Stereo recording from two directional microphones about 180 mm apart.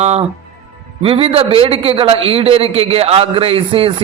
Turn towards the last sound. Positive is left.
turn(degrees=-30)  # may be behind; listen again after turning